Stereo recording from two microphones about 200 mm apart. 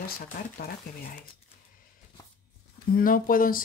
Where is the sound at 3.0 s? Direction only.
45° left (ahead or behind).